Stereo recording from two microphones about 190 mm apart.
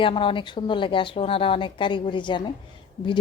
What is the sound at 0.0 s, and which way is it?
A woman's voice, 25° left (ahead or behind).